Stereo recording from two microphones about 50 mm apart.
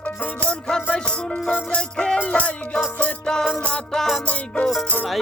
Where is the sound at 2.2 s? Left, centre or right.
Left.